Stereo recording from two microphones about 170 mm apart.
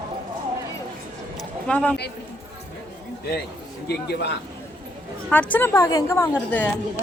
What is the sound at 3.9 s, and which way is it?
Speech, 75° left (ahead or behind).